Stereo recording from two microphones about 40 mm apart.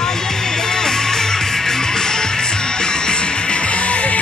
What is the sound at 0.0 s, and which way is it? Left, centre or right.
Music, centre.